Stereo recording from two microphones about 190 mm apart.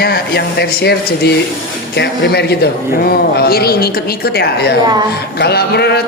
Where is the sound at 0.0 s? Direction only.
55° left (ahead or behind).